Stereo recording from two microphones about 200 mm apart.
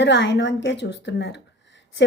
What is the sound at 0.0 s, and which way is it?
Speech, 60° left (ahead or behind).